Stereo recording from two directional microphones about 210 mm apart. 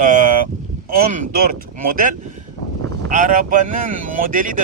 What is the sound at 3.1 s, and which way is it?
Speech, 40° right (ahead or behind).